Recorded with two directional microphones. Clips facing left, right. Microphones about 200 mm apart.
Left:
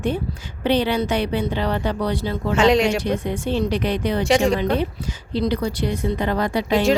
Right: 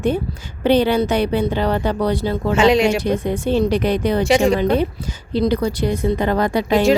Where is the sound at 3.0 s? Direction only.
40° right (ahead or behind).